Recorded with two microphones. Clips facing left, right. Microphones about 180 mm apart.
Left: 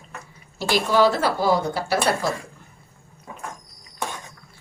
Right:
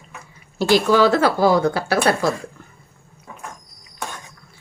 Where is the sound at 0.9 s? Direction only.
90° right; by 2.1 s 70° right (ahead or behind).